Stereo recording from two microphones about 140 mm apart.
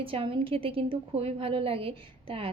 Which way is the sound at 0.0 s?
40° right (ahead or behind).